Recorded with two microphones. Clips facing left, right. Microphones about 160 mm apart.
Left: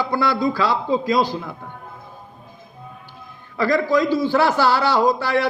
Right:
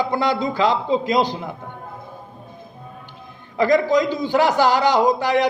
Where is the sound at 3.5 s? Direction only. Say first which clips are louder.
Right 2 dB; 20° right (ahead or behind).